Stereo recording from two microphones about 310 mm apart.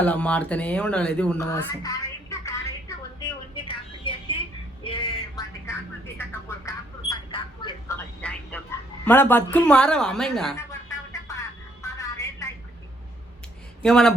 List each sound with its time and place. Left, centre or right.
0.0 s speech: centre
3.2 s vehicle: centre
4.8 s music: centre
6.7 s a sound: centre
13.8 s speech: centre